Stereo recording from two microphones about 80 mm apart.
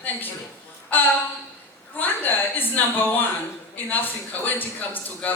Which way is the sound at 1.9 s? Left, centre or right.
Left.